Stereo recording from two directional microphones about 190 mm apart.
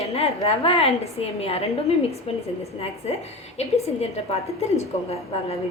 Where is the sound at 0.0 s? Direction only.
30° left (ahead or behind).